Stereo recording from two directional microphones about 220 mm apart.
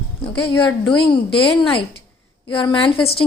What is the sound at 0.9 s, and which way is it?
Speech, 25° left (ahead or behind).